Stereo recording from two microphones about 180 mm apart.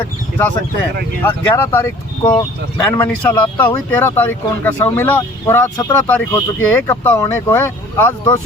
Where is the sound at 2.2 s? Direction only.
25° left (ahead or behind).